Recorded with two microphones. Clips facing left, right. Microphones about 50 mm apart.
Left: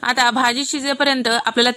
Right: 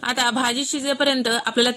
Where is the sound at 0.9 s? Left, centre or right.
Left.